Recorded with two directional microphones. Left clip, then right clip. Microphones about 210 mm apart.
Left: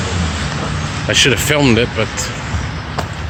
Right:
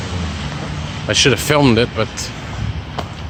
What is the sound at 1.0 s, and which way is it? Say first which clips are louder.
Speech: left 1 dB; 10° right (ahead or behind).